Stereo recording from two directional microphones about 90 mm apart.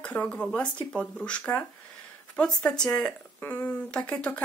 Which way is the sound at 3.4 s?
20° left (ahead or behind).